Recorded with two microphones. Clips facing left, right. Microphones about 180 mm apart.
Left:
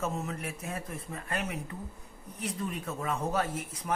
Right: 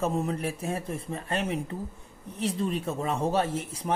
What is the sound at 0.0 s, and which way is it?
Speech, 35° right (ahead or behind).